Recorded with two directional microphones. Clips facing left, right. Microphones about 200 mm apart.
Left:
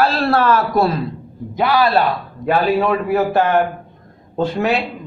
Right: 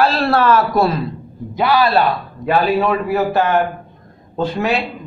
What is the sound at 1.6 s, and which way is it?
A man's voice, 50° left (ahead or behind).